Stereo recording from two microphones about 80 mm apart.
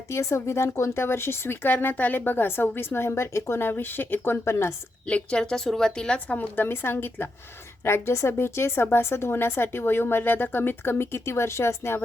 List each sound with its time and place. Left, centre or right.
0.1 s speech: left
5.0 s a woman's voice: centre; by 12.0 s left